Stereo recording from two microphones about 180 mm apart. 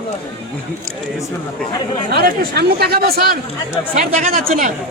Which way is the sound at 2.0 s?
60° right (ahead or behind).